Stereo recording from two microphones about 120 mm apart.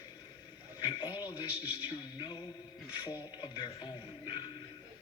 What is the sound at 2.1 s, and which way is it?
Speech, 40° left (ahead or behind).